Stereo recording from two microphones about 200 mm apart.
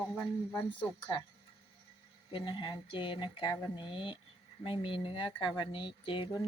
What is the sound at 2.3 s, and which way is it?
Speech, 25° left (ahead or behind).